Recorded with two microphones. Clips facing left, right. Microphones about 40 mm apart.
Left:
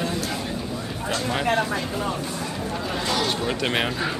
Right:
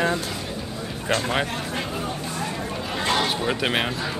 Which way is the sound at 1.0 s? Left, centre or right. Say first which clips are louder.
Right 3 dB; right.